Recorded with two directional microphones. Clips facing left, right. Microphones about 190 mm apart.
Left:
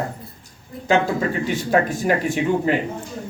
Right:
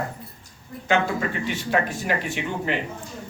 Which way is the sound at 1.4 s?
45° left (ahead or behind).